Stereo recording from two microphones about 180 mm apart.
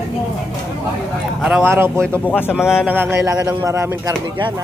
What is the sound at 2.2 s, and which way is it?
Speech, 10° left (ahead or behind).